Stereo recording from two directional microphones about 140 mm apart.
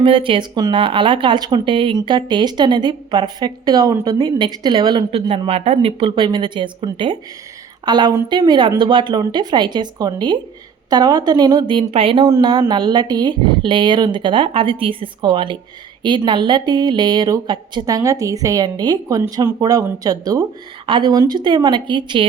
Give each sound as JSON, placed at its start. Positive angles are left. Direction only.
{"t": 0.0, "sound": "a woman's voice", "side_deg": -35}
{"t": 5.5, "sound": "speech", "side_deg": -50}
{"t": 12.2, "sound": "a woman's voice", "side_deg": -30}